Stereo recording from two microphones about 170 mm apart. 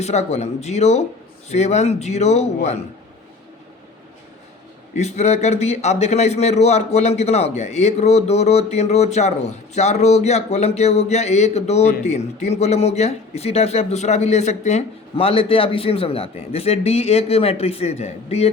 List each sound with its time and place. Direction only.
0.0 s a man's voice: 40° left (ahead or behind)
4.9 s a man's voice: 40° left (ahead or behind)